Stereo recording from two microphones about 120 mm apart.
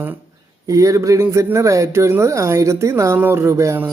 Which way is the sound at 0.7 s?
25° right (ahead or behind).